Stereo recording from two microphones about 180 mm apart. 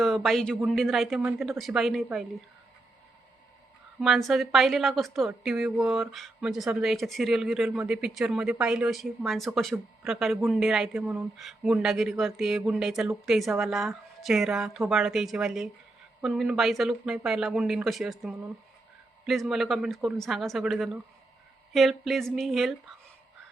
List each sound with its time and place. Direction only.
0.0 s speech: centre (ahead or behind)
4.0 s speech: centre (ahead or behind)